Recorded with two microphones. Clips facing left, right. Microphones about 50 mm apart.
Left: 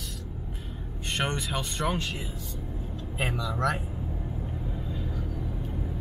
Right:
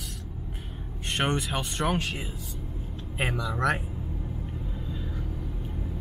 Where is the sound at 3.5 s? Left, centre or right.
Right.